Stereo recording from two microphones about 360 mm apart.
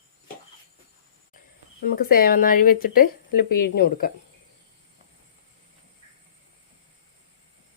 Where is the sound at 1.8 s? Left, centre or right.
Left.